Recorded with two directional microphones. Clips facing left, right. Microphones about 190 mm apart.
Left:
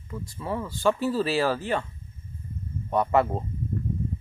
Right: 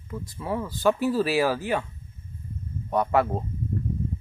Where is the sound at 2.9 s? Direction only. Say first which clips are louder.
Even; centre (ahead or behind).